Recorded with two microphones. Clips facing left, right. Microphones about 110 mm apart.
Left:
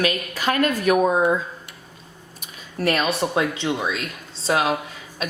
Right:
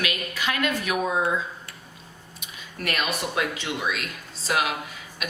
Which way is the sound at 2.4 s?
35° left (ahead or behind).